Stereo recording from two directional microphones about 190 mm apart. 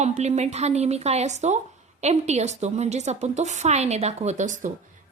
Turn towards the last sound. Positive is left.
turn(degrees=-40)  # may be behind; listen again after turning